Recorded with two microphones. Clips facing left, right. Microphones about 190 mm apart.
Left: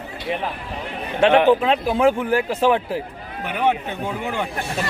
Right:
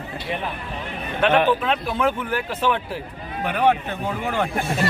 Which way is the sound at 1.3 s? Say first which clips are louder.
Left 4 dB; 15° left (ahead or behind).